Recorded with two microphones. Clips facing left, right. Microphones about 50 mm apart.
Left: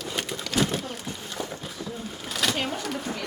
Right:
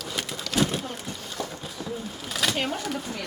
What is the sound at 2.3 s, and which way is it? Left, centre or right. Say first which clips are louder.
Speech: even; centre.